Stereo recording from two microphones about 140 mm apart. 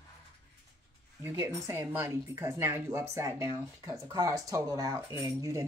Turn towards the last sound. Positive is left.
turn(degrees=-25)  # may be behind; listen again after turning